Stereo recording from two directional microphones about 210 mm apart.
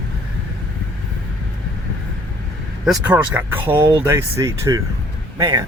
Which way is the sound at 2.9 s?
5° right (ahead or behind).